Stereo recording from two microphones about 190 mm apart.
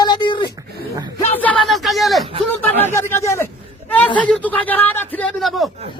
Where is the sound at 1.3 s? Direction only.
5° left (ahead or behind).